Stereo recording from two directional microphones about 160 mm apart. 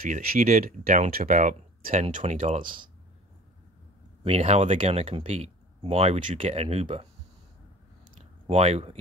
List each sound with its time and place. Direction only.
0.0 s speech: 60° right (ahead or behind); by 2.6 s 45° right (ahead or behind)
4.2 s speech: 40° right (ahead or behind)
8.5 s speech: 40° right (ahead or behind)